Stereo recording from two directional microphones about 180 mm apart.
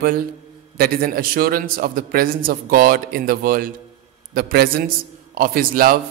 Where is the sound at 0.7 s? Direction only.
55° right (ahead or behind).